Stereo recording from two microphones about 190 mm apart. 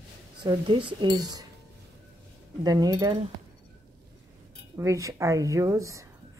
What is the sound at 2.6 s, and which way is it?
Speech, 20° right (ahead or behind).